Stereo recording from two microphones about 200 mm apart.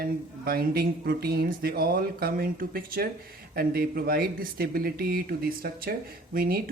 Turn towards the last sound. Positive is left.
turn(degrees=-50)  # may be behind; listen again after turning